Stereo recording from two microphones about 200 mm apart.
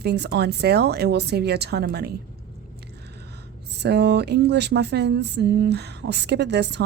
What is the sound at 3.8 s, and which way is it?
Speech, 55° right (ahead or behind).